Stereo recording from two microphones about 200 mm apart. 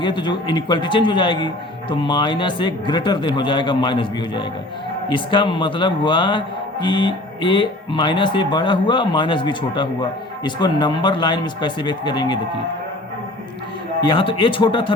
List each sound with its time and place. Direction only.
0.0 s speech: 20° left (ahead or behind)
14.1 s speech: 25° left (ahead or behind)